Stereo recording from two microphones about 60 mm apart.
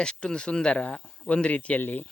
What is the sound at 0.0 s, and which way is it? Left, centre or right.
Speech, centre.